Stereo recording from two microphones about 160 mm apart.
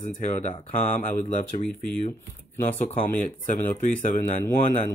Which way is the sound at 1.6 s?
5° left (ahead or behind).